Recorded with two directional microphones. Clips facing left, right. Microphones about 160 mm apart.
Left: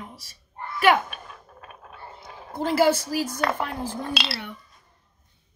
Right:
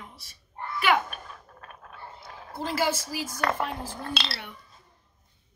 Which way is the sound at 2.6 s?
60° left (ahead or behind).